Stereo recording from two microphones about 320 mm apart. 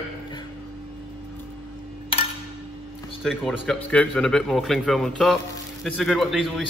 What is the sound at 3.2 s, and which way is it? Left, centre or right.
A man's voice, centre.